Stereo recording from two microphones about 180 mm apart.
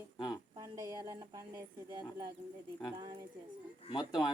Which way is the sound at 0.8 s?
20° right (ahead or behind).